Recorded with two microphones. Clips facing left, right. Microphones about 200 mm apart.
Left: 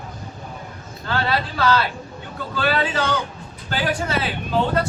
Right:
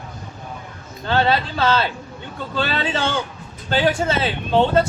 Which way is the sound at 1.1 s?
25° right (ahead or behind).